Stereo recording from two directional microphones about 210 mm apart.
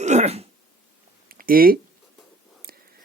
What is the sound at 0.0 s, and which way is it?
Throat clearing, 35° right (ahead or behind).